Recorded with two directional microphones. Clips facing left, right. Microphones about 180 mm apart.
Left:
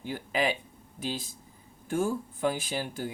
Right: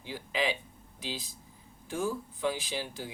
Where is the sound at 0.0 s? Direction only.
50° left (ahead or behind).